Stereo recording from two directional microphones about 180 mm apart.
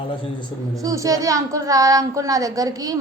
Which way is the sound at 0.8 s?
20° right (ahead or behind).